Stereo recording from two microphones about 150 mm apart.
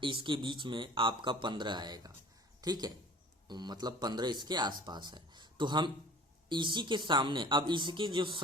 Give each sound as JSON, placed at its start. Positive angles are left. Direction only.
{"t": 0.0, "sound": "speech", "side_deg": -35}